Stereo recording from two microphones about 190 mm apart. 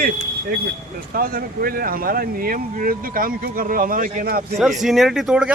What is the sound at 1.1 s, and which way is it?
Speech, 50° right (ahead or behind).